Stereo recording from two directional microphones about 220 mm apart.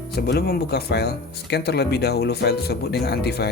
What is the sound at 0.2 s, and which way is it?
Speech, 45° left (ahead or behind).